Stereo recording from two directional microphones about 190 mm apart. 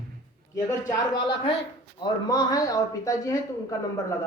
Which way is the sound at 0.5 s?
20° left (ahead or behind).